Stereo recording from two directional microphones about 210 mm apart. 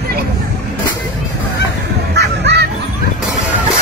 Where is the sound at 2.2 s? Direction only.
55° right (ahead or behind).